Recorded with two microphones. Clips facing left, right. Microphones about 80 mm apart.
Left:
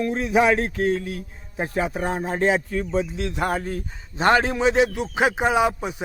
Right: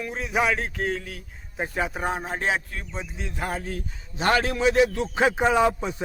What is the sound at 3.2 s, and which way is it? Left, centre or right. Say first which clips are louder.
Speech: left 6 dB; left.